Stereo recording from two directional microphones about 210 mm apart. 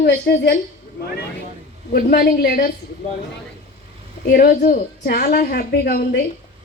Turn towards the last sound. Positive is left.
turn(degrees=45)  # may be behind; listen again after turning